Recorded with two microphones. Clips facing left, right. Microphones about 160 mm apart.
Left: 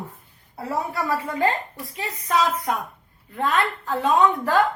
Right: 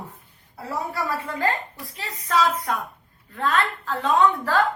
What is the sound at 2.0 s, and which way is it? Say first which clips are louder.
A woman's voice: even; 20° left (ahead or behind).